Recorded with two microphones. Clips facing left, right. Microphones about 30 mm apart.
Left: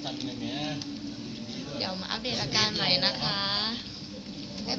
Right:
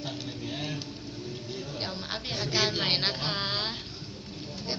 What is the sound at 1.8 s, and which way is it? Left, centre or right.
A woman's voice, centre.